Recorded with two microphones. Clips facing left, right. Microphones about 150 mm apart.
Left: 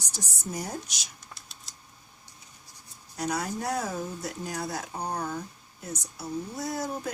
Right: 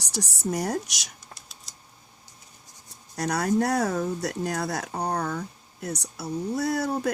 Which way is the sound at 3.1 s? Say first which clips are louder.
Right 7 dB; 75° right (ahead or behind).